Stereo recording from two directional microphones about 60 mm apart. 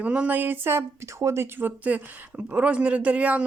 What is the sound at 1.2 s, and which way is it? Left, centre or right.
Speech, right.